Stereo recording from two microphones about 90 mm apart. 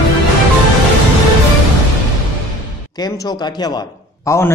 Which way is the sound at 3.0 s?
50° left (ahead or behind).